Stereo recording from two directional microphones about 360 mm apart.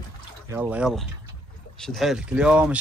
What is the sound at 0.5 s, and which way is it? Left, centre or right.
Speech, centre.